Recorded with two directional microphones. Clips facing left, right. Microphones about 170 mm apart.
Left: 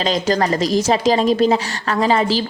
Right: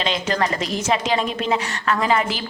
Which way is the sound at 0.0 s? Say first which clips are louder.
Left 4 dB; 35° left (ahead or behind).